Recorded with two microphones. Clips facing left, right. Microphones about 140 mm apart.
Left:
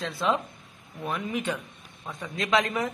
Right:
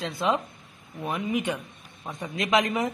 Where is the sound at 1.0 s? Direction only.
15° right (ahead or behind).